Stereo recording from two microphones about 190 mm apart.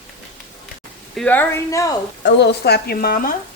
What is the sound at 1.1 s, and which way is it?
Stir, 10° left (ahead or behind).